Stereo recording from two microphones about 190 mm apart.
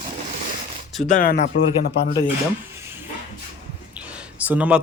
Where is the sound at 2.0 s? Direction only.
25° left (ahead or behind).